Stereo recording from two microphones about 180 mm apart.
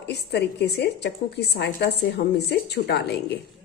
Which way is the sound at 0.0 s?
65° left (ahead or behind).